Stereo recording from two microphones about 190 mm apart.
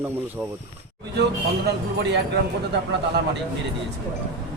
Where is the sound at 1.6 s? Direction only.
65° right (ahead or behind).